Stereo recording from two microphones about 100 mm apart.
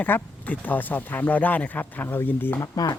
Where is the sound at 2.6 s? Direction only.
40° left (ahead or behind).